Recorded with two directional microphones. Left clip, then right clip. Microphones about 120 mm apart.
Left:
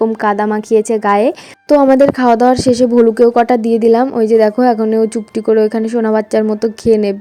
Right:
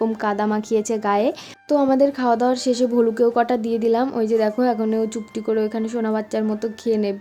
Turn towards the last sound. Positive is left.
turn(degrees=60)  # may be behind; listen again after turning